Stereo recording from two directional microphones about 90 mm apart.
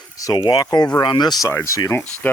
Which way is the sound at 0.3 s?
50° left (ahead or behind).